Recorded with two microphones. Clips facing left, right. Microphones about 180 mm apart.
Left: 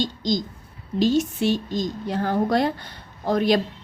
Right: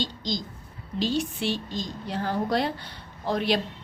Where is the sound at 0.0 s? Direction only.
45° left (ahead or behind).